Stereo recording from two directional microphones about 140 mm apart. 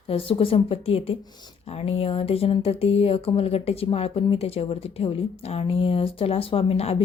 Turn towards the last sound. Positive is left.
turn(degrees=45)  # may be behind; listen again after turning